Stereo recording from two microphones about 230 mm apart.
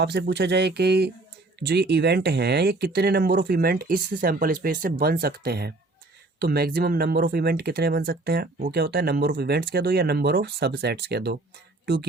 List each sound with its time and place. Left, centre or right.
0.0 s speech: right